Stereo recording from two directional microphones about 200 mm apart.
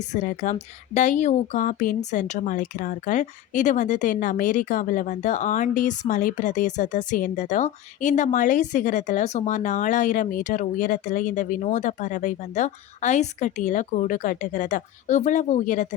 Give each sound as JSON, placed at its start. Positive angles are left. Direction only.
{"t": 0.1, "sound": "speech", "side_deg": 40}